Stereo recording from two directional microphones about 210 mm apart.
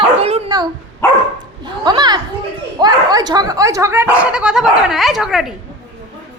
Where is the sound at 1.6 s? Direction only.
20° right (ahead or behind).